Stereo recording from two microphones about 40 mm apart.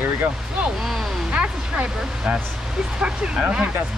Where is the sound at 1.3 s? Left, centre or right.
Right.